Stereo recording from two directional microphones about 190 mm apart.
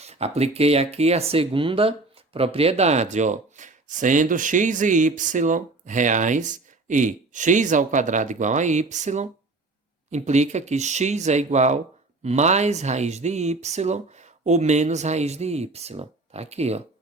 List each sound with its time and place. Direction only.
0.0 s speech: 35° right (ahead or behind)